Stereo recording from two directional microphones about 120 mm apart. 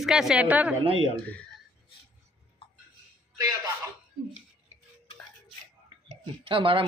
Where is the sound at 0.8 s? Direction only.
50° right (ahead or behind).